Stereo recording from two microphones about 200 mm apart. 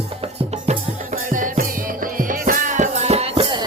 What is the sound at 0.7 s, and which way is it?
Music, 40° right (ahead or behind).